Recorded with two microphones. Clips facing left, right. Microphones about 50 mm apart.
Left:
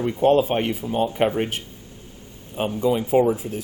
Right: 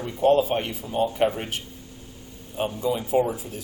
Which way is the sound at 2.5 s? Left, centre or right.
Left.